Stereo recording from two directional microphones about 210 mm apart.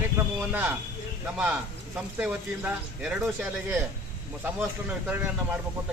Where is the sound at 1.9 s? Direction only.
5° right (ahead or behind).